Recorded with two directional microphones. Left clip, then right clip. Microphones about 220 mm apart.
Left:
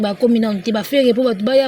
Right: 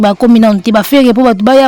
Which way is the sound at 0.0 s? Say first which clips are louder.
Right 9 dB; 50° right (ahead or behind).